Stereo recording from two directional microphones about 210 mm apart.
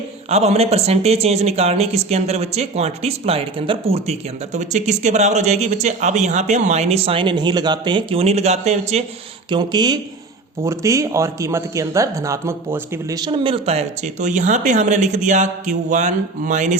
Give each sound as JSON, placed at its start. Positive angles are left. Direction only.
{"t": 0.3, "sound": "speech", "side_deg": -30}
{"t": 9.5, "sound": "speech", "side_deg": -20}